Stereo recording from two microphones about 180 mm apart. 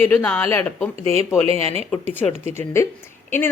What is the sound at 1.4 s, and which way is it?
Speech, 35° right (ahead or behind).